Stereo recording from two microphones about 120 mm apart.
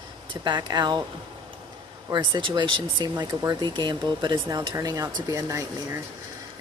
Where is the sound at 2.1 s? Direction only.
40° right (ahead or behind).